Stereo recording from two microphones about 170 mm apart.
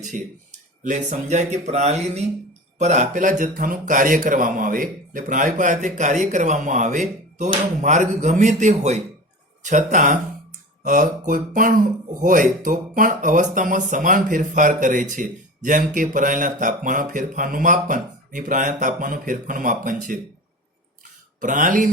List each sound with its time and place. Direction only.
0.1 s speech: 50° right (ahead or behind)
21.4 s speech: 50° right (ahead or behind)